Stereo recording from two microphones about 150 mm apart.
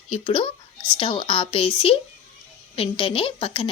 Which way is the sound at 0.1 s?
35° left (ahead or behind).